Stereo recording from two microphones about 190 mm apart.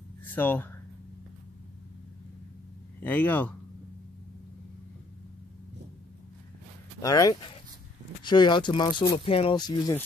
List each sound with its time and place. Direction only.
0.2 s speech: 10° left (ahead or behind)
3.0 s speech: 10° left (ahead or behind)
7.0 s speech: 20° left (ahead or behind)